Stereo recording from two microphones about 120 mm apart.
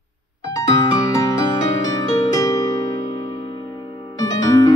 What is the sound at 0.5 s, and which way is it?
Music, 30° left (ahead or behind).